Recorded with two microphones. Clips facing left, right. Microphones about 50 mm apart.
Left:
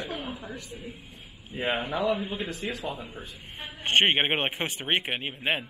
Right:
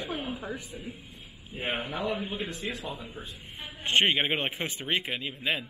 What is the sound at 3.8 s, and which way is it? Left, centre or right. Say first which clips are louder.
A man's voice: left 2 dB; left.